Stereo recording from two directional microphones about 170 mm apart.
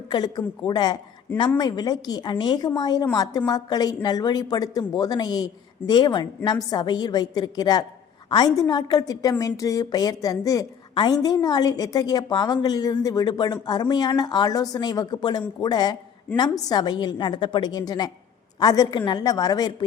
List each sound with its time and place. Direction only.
0.1 s a woman's voice: 25° left (ahead or behind)